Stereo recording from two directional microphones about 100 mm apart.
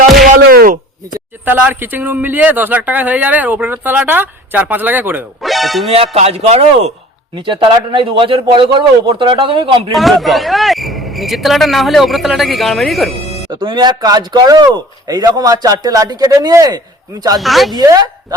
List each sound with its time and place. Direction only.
1.5 s speech: 15° right (ahead or behind)
5.4 s speech: centre (ahead or behind)
6.1 s speech: 90° right
7.3 s a man's voice: 55° right (ahead or behind)
9.9 s speech: centre (ahead or behind)
13.5 s speech: 55° right (ahead or behind)
17.4 s speech: centre (ahead or behind)
17.7 s speech: 40° right (ahead or behind)